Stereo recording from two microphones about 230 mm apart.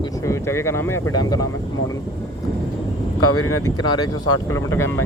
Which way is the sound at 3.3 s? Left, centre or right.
Left.